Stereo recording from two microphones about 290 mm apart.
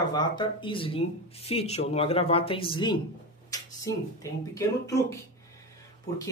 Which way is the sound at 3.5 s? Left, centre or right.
Centre.